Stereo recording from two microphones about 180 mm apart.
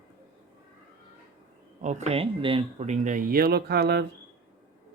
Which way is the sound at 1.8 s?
40° right (ahead or behind).